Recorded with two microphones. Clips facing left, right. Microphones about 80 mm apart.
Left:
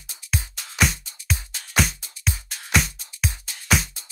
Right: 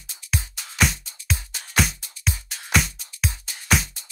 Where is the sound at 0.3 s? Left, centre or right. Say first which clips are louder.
Even; centre.